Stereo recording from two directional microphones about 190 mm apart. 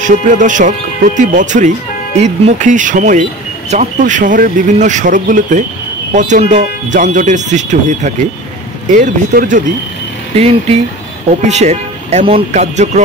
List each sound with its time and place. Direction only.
0.0 s speech: 40° right (ahead or behind)